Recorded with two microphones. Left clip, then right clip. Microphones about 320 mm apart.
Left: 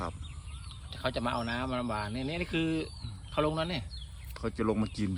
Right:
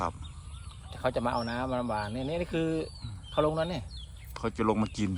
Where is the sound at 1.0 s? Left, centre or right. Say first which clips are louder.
Right 3 dB; centre.